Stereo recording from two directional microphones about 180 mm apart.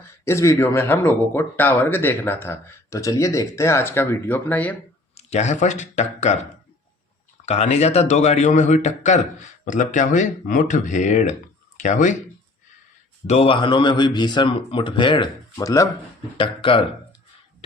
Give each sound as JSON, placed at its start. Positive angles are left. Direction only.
{"t": 0.3, "sound": "speech", "side_deg": 15}
{"t": 5.1, "sound": "a man's voice", "side_deg": 40}
{"t": 13.2, "sound": "speech", "side_deg": 35}
{"t": 16.4, "sound": "speech", "side_deg": 30}